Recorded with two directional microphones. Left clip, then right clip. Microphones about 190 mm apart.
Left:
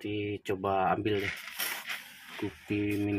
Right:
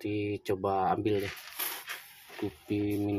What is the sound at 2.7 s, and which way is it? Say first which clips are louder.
Speech: even; centre (ahead or behind).